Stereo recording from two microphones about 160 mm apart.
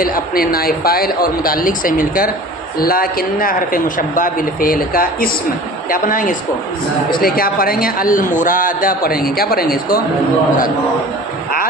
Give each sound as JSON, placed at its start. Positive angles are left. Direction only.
{"t": 0.0, "sound": "a man's voice", "side_deg": 65}